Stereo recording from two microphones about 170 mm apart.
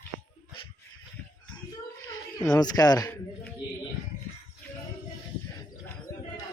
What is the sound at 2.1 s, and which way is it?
Speech, 20° left (ahead or behind).